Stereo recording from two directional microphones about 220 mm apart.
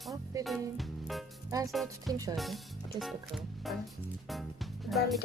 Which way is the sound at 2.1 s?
15° right (ahead or behind).